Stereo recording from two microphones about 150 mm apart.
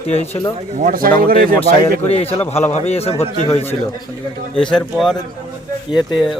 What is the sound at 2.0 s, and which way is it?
A man's voice, 40° left (ahead or behind).